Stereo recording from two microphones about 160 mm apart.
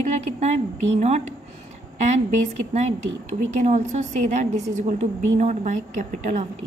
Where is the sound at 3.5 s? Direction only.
50° right (ahead or behind).